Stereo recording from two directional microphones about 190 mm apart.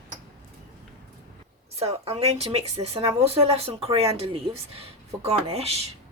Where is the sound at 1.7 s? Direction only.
30° right (ahead or behind).